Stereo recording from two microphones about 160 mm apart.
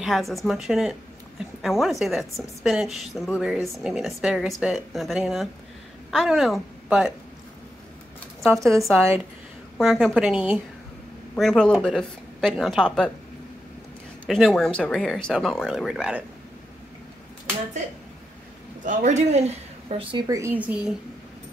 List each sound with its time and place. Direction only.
0.0 s a woman's voice: centre (ahead or behind)
8.6 s speech: centre (ahead or behind)
14.2 s speech: centre (ahead or behind)
18.9 s speech: 50° right (ahead or behind); by 20.9 s 10° right (ahead or behind)